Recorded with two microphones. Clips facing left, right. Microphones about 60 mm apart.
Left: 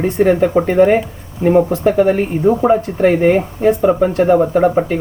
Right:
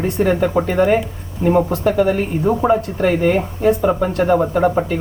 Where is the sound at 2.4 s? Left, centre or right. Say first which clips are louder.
Left 3 dB; centre.